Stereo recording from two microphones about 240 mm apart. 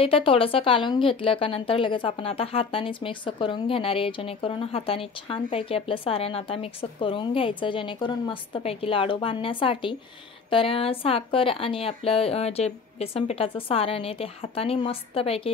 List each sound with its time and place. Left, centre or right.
0.0 s a woman's voice: left